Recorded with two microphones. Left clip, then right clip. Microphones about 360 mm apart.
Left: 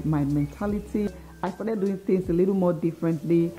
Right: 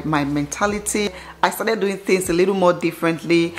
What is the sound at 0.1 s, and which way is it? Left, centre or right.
A woman's voice, centre.